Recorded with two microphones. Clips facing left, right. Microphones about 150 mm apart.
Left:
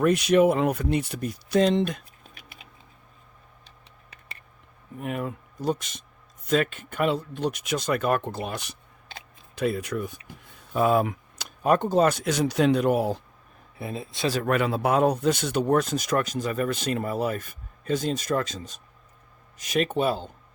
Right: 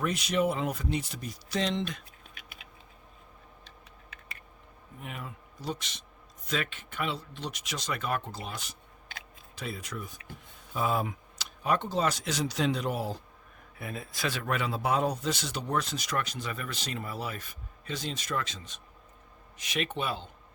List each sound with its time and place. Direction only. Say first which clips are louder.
0.0 s speech: left 9 dB; 60° left (ahead or behind)
4.9 s speech: left 12 dB; 50° left (ahead or behind)
13.7 s speech: left 5 dB; 30° left (ahead or behind)
14.4 s speech: left 6 dB; 55° left (ahead or behind)